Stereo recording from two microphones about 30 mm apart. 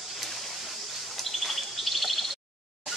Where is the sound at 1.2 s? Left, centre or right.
Centre.